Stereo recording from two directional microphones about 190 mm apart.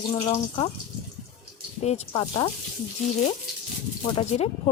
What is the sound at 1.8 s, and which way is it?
Speech, 35° left (ahead or behind).